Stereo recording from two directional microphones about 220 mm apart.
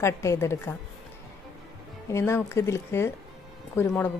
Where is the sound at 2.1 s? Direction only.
10° left (ahead or behind).